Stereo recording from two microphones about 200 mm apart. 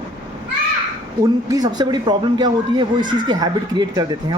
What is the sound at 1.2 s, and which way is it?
A woman's voice, 20° right (ahead or behind).